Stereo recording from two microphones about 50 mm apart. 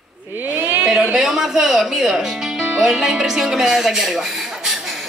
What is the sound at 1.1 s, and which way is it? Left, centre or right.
Music, centre.